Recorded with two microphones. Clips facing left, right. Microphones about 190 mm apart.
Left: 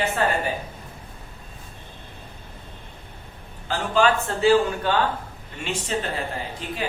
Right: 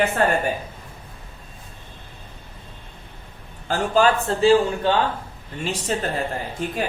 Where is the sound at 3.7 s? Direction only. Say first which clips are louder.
Right 2 dB; 40° right (ahead or behind).